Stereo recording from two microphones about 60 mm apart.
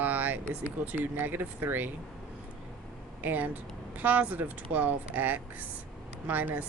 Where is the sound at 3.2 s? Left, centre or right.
Right.